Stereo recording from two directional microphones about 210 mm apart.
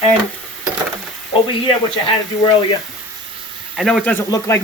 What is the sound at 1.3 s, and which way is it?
Speech, 25° left (ahead or behind).